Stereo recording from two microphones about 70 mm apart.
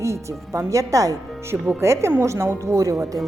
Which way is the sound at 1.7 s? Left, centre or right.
Right.